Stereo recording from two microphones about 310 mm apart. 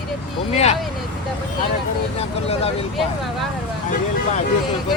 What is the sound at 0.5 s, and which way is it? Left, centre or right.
Speech, left.